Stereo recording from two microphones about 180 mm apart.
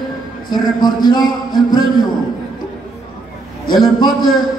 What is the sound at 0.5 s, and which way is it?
Speech, 25° left (ahead or behind).